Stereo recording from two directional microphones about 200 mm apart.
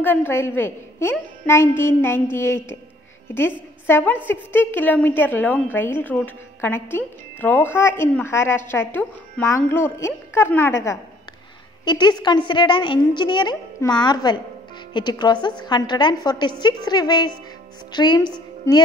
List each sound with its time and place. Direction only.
0.0 s a woman's voice: 10° left (ahead or behind)
3.8 s a woman's voice: 10° left (ahead or behind)